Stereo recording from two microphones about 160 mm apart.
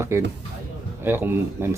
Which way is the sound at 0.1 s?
15° right (ahead or behind).